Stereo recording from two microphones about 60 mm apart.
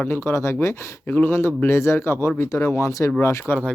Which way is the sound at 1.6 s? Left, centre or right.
Left.